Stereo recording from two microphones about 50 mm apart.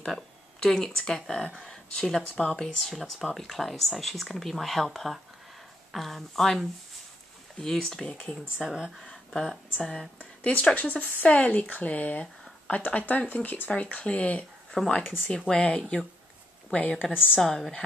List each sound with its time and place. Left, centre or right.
0.0 s speech: centre
2.9 s speech: centre
7.6 s speech: centre
8.0 s speech: left
8.6 s speech: centre
8.9 s a woman's voice: centre; by 13.7 s left
13.7 s speech: left
14.9 s speech: centre
16.7 s a woman's voice: left
17.6 s speech: centre